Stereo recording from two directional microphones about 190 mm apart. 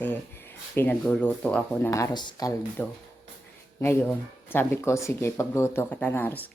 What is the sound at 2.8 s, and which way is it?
Speech, 10° left (ahead or behind).